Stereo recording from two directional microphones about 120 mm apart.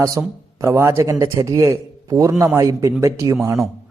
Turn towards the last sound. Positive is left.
turn(degrees=-25)  # may be behind; listen again after turning